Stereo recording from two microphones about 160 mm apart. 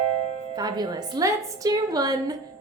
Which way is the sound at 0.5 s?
25° right (ahead or behind).